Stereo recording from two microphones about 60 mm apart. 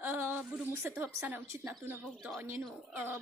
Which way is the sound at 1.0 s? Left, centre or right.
Right.